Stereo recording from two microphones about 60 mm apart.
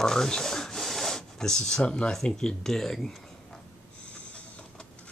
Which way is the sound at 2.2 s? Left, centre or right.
Centre.